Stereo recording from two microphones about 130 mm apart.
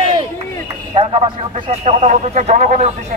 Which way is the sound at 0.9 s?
50° right (ahead or behind).